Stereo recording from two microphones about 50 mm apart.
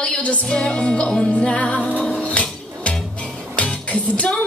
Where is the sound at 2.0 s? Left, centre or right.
Left.